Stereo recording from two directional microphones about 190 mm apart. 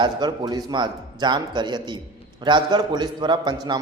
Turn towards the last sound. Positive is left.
turn(degrees=-25)  # may be behind; listen again after turning